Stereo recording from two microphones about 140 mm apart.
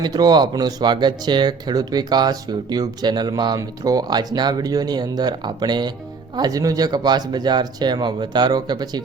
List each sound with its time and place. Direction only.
0.0 s speech: 30° right (ahead or behind)